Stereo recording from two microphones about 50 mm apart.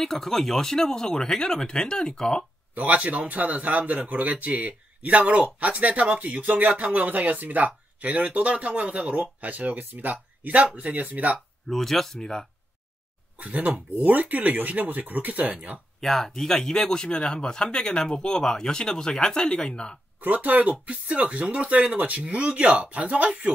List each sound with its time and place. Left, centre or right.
0.0 s speech: centre
2.7 s a man's voice: right
11.3 s speech: centre
13.4 s a man's voice: right
16.0 s speech: centre
20.2 s a man's voice: right